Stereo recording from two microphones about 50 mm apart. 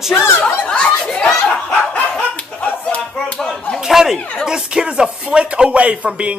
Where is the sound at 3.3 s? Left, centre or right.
Centre.